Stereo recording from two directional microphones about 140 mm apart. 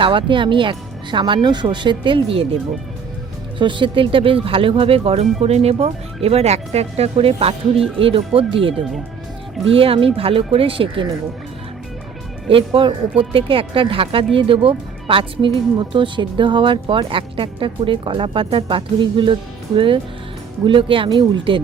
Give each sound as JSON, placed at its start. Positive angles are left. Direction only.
{"t": 0.0, "sound": "speech", "side_deg": -35}
{"t": 3.6, "sound": "speech", "side_deg": -35}
{"t": 9.7, "sound": "speech", "side_deg": -40}
{"t": 12.5, "sound": "speech", "side_deg": -40}